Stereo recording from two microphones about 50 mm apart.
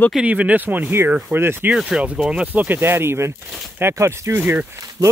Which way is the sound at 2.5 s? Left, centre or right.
Right.